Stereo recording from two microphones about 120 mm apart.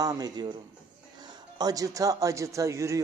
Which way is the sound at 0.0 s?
30° right (ahead or behind).